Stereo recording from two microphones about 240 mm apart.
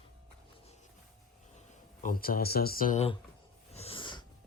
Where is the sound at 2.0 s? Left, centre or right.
Left.